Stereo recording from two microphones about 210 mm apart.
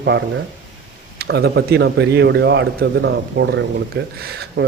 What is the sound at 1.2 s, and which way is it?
A man's voice, 50° right (ahead or behind).